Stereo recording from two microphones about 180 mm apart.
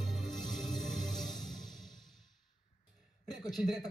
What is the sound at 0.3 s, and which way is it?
Music, centre (ahead or behind).